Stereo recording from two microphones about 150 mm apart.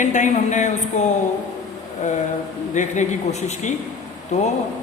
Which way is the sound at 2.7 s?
55° left (ahead or behind).